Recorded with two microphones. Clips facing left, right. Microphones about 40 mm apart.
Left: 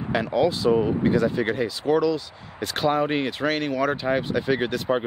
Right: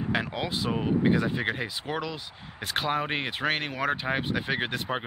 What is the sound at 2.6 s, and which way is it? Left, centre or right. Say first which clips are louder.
Speech: left 6 dB; centre.